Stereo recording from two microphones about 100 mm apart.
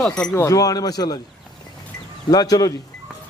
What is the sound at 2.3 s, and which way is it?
Speech, 40° left (ahead or behind).